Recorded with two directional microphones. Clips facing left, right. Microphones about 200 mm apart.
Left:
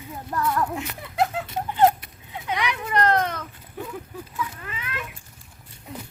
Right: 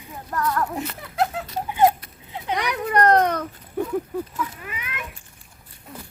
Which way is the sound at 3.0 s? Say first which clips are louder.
Right 5 dB; 55° right (ahead or behind).